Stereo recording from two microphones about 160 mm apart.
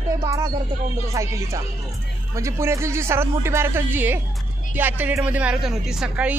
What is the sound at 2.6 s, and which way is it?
Speech, 15° right (ahead or behind).